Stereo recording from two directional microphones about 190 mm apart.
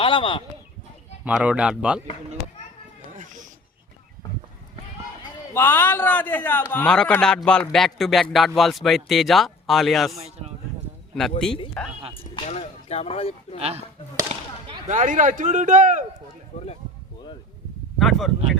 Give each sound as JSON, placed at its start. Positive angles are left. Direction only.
{"t": 0.0, "sound": "speech", "side_deg": 25}
{"t": 1.2, "sound": "a man's voice", "side_deg": -5}
{"t": 3.2, "sound": "a sound", "side_deg": -40}
{"t": 5.5, "sound": "a man's voice", "side_deg": 10}
{"t": 10.2, "sound": "a sound", "side_deg": -35}
{"t": 11.1, "sound": "a man's voice", "side_deg": 5}
{"t": 12.1, "sound": "speech", "side_deg": 30}
{"t": 13.6, "sound": "speech", "side_deg": -35}
{"t": 14.8, "sound": "speech", "side_deg": -45}
{"t": 18.0, "sound": "speech", "side_deg": 0}